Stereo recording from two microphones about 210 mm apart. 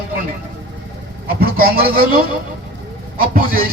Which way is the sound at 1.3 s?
45° right (ahead or behind).